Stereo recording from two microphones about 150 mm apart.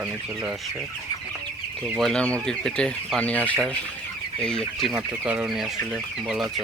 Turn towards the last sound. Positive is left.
turn(degrees=-5)  # may be behind; listen again after turning